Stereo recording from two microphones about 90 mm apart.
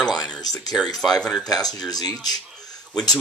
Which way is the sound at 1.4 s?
45° left (ahead or behind).